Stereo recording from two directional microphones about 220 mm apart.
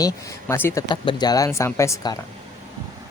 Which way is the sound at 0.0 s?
10° left (ahead or behind).